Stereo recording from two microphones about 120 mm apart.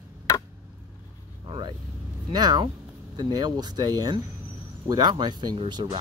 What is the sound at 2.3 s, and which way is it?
Speech, 35° right (ahead or behind).